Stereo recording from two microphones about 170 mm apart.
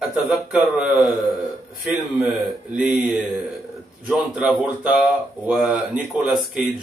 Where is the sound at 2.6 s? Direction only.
5° right (ahead or behind).